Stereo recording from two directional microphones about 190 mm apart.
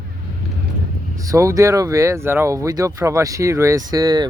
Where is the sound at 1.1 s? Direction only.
15° right (ahead or behind).